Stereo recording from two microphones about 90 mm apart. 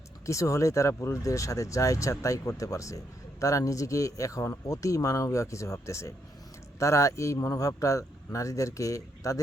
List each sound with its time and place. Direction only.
0.3 s a man's voice: 35° left (ahead or behind)